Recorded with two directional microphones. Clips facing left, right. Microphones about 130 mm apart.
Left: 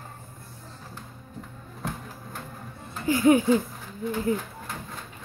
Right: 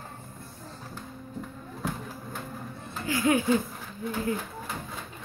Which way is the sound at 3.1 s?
20° left (ahead or behind).